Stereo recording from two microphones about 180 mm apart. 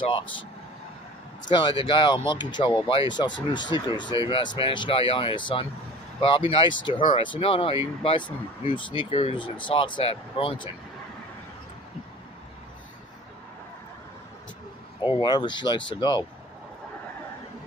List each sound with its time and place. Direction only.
0.0 s speech: 30° left (ahead or behind)
1.5 s speech: 25° left (ahead or behind)
15.0 s speech: 25° left (ahead or behind)